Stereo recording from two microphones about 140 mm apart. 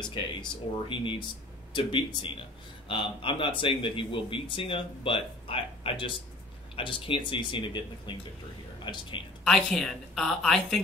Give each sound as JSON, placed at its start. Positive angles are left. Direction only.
{"t": 0.0, "sound": "speech", "side_deg": 35}
{"t": 9.4, "sound": "a woman's voice", "side_deg": 5}